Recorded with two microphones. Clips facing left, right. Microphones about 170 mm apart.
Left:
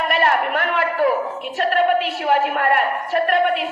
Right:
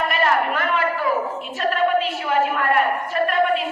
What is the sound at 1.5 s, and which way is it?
A woman's voice, 65° left (ahead or behind).